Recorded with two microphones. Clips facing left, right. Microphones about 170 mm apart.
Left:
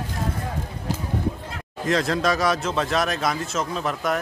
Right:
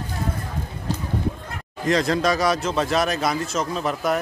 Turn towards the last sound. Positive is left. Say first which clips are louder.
# right 2 dB
turn(degrees=0)  # may be behind; listen again after turning